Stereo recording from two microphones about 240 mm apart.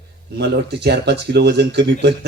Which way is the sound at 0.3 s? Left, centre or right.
Right.